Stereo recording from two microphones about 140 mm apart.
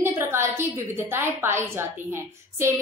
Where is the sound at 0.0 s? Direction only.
20° right (ahead or behind).